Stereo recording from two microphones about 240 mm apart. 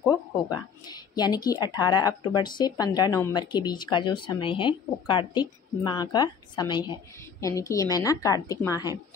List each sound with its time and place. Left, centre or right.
0.1 s a woman's voice: centre